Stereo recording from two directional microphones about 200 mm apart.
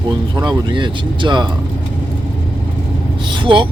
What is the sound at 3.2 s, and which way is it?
Vehicle, 25° right (ahead or behind).